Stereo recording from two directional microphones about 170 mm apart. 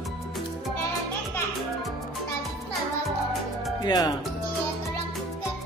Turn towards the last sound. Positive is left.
turn(degrees=25)  # may be behind; listen again after turning